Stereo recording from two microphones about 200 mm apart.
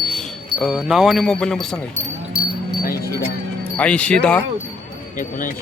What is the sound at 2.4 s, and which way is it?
Wind chime, 30° right (ahead or behind).